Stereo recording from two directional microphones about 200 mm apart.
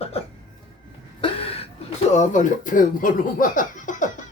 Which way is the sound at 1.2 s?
30° left (ahead or behind).